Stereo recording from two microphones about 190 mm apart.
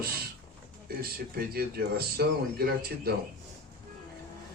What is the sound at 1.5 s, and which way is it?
Speech, 55° right (ahead or behind).